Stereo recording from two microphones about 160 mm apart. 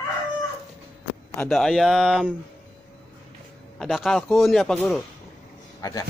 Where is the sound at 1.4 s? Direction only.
Centre (ahead or behind).